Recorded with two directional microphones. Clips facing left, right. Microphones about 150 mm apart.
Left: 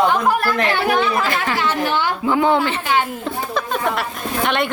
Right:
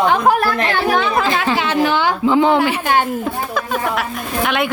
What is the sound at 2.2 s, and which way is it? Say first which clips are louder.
Speech: right 3 dB; 20° right (ahead or behind).